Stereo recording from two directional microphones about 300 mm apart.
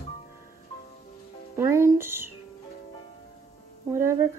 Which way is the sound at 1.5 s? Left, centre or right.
Centre.